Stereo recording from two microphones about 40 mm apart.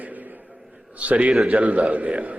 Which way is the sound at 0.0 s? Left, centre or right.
Right.